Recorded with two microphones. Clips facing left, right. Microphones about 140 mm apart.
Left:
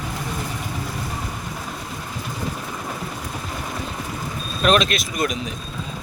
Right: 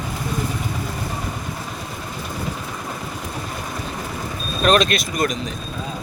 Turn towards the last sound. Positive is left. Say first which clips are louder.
# right 2 dB
turn(degrees=0)  # may be behind; listen again after turning